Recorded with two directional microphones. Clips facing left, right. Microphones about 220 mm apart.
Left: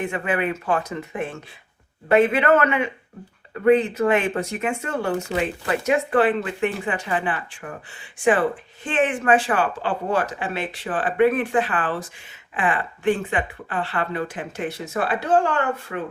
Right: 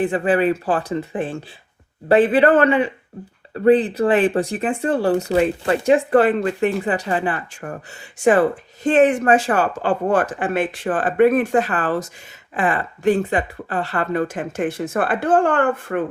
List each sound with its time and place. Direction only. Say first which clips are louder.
0.0 s speech: right 7 dB; 35° right (ahead or behind); by 16.0 s 50° right (ahead or behind)